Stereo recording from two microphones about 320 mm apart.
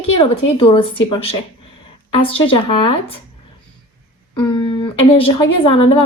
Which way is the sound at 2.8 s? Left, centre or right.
Centre.